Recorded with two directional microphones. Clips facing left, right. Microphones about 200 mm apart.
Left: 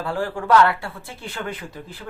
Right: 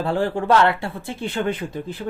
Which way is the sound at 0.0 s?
25° right (ahead or behind).